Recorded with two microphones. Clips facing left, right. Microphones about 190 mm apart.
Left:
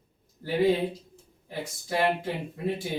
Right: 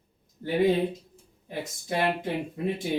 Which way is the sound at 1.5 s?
20° right (ahead or behind).